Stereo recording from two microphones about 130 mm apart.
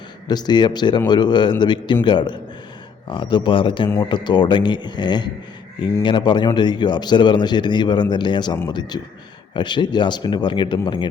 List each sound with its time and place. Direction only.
0.3 s a man's voice: 35° left (ahead or behind)